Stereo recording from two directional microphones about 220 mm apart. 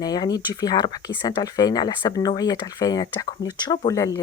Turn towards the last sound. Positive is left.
turn(degrees=15)  # may be behind; listen again after turning